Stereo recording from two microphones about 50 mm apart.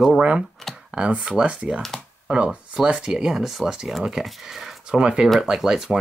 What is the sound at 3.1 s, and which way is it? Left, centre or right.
Speech, centre.